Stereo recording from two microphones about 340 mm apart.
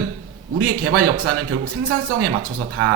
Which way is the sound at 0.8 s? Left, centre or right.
Right.